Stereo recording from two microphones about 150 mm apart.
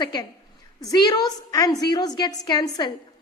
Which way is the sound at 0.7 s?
25° left (ahead or behind).